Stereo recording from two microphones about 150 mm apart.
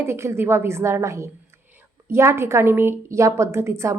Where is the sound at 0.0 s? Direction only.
15° right (ahead or behind).